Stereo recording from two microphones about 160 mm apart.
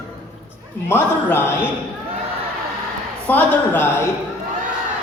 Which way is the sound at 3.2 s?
10° left (ahead or behind).